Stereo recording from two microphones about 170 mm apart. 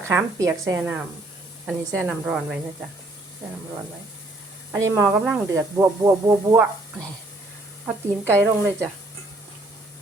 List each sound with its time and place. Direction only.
0.0 s a woman's voice: 15° right (ahead or behind)
4.7 s speech: 20° right (ahead or behind)
8.4 s a woman's voice: 15° right (ahead or behind)